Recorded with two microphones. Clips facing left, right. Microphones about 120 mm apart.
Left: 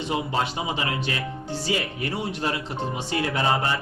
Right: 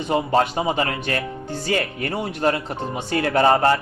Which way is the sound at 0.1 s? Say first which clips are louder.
Right 8 dB; 50° right (ahead or behind).